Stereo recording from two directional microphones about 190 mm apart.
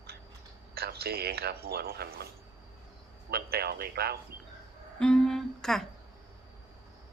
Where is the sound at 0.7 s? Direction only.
55° right (ahead or behind).